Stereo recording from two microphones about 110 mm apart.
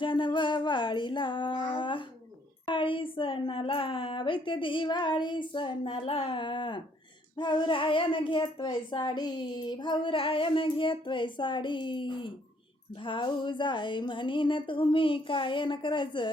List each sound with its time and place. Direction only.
0.0 s child singing: 45° left (ahead or behind)
2.6 s a woman's voice: 50° left (ahead or behind)